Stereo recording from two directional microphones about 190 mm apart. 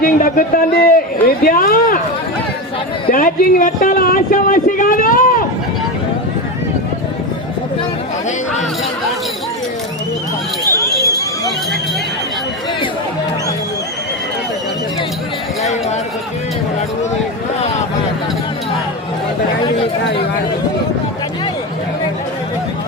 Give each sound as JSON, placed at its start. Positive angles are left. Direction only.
{"t": 0.0, "sound": "speech", "side_deg": 50}
{"t": 3.1, "sound": "speech", "side_deg": 45}